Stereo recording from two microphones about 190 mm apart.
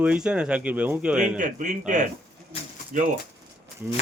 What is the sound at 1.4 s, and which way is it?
A man's voice, 40° right (ahead or behind).